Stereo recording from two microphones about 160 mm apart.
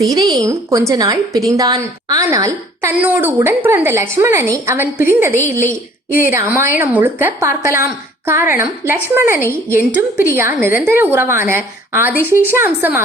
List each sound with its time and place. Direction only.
0.0 s a woman's voice: 25° right (ahead or behind)